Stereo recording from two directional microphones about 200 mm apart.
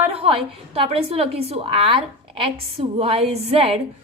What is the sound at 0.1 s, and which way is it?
A woman's voice, 30° right (ahead or behind).